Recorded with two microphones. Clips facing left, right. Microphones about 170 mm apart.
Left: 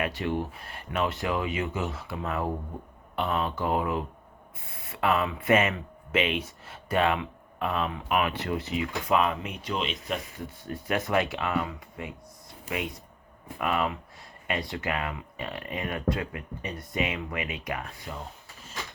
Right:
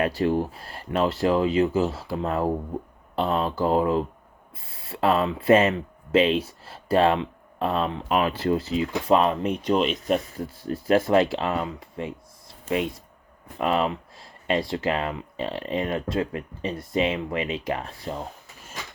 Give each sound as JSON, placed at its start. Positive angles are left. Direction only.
{"t": 0.0, "sound": "speech", "side_deg": -35}
{"t": 13.6, "sound": "speech", "side_deg": -25}